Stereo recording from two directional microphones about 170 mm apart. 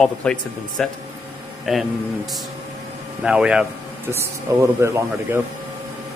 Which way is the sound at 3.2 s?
5° right (ahead or behind).